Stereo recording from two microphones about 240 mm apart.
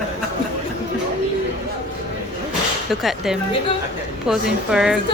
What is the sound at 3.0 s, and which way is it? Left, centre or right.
A woman's voice, centre.